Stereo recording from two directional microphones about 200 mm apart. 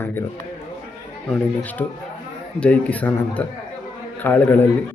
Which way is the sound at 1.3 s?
10° left (ahead or behind).